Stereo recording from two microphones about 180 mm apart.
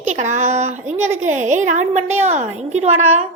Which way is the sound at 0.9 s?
15° right (ahead or behind).